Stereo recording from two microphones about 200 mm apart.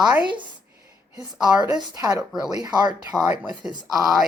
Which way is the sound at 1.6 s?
20° right (ahead or behind).